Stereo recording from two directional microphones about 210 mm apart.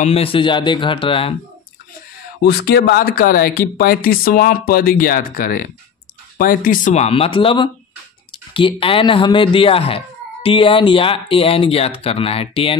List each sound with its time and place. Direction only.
0.0 s speech: 30° left (ahead or behind)
2.4 s speech: 50° left (ahead or behind); by 12.7 s 25° left (ahead or behind)